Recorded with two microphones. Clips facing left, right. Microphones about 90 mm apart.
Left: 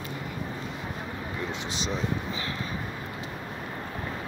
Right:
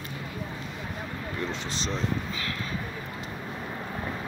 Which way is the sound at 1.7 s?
15° left (ahead or behind).